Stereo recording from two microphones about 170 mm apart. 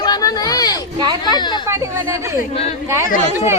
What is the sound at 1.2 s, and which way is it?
Speech, 25° left (ahead or behind).